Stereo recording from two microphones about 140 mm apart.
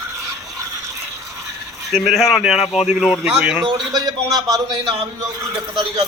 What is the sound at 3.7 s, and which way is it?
Speech, 25° right (ahead or behind).